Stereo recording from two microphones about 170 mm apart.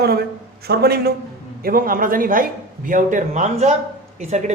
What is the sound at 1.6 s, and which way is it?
Speech, 55° right (ahead or behind).